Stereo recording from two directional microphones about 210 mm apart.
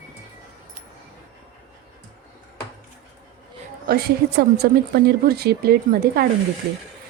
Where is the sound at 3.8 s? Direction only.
45° right (ahead or behind).